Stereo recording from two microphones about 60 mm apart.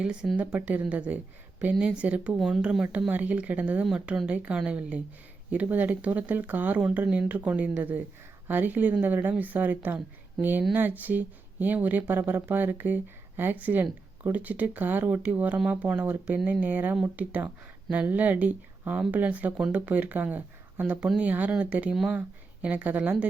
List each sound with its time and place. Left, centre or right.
0.0 s speech: centre
2.3 s speech: centre
3.1 s speech: right